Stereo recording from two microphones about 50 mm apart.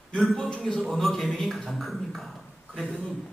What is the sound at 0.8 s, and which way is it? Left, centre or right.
Speech, centre.